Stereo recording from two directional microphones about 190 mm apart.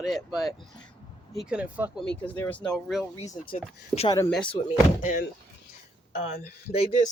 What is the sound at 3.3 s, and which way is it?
Speech, 50° left (ahead or behind).